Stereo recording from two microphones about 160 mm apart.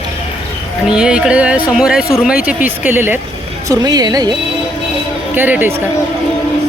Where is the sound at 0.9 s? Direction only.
5° right (ahead or behind).